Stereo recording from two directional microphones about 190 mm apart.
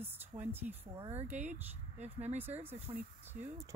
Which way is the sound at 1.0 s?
35° right (ahead or behind).